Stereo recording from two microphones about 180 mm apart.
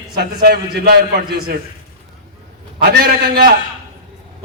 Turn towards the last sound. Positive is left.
turn(degrees=-60)  # may be behind; listen again after turning